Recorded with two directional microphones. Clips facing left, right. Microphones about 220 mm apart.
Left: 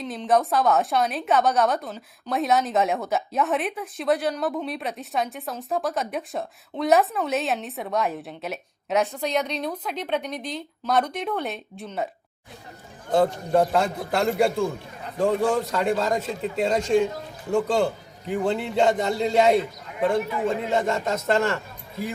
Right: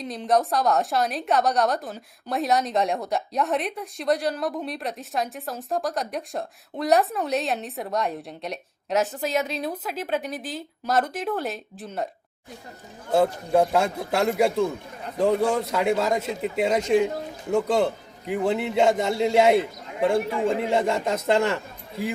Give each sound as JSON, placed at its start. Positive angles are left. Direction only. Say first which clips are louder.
{"t": 0.0, "sound": "a woman's voice", "louder": "left 1 dB", "side_deg": 0}
{"t": 13.1, "sound": "a man's voice", "louder": "even", "side_deg": -10}
{"t": 20.3, "sound": "speech", "louder": "right 2 dB", "side_deg": -30}
{"t": 20.7, "sound": "a man's voice", "louder": "right 1 dB", "side_deg": -15}